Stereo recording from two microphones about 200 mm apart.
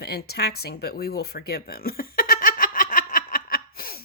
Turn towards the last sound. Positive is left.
turn(degrees=45)  # may be behind; listen again after turning